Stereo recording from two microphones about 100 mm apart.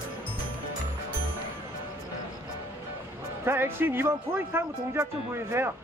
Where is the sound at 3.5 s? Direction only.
20° right (ahead or behind).